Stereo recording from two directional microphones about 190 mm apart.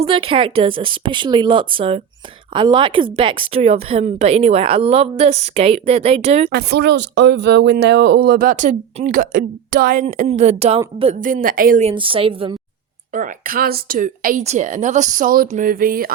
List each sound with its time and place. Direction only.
0.0 s a woman's voice: 30° right (ahead or behind)
6.5 s speech: 60° right (ahead or behind)
11.8 s a woman's voice: 30° right (ahead or behind)
13.1 s speech: 45° right (ahead or behind)